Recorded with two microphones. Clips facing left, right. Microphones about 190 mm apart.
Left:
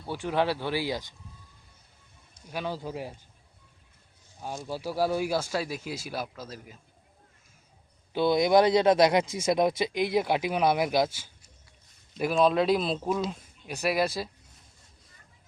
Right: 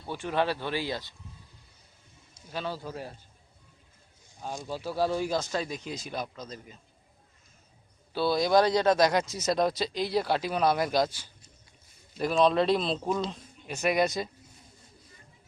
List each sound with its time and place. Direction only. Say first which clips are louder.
0.0 s speech: left 1 dB; 10° left (ahead or behind)
2.5 s speech: left 2 dB; 15° left (ahead or behind)
4.7 s speech: left 1 dB; 10° left (ahead or behind)
8.1 s speech: left 2 dB; 20° left (ahead or behind); by 14.3 s 5° left (ahead or behind)